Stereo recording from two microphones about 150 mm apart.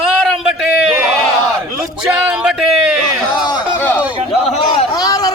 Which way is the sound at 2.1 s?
5° right (ahead or behind).